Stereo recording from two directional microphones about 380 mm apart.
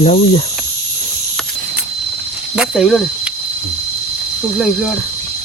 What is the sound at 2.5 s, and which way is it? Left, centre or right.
Speech, centre.